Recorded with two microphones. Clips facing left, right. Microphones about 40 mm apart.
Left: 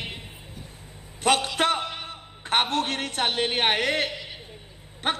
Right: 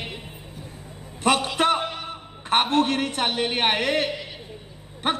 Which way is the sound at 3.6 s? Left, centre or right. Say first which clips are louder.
Right 1 dB; right.